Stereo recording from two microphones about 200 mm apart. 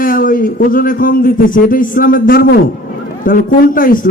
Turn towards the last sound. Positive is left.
turn(degrees=45)  # may be behind; listen again after turning